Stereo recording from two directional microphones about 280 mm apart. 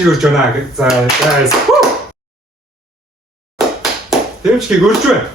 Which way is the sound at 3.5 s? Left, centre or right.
Centre.